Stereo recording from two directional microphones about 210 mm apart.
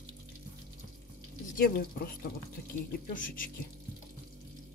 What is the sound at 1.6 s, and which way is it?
Speech, 45° left (ahead or behind).